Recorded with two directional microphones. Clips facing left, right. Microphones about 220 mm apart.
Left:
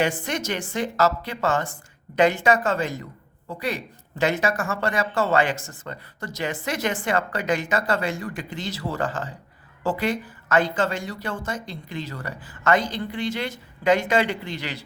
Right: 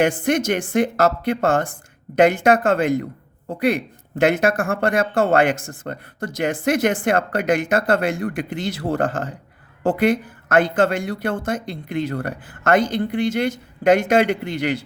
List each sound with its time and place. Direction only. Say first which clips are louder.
0.0 s a woman's voice: right 7 dB; 50° right (ahead or behind)